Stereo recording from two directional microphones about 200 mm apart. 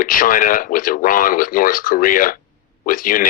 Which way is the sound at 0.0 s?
45° left (ahead or behind).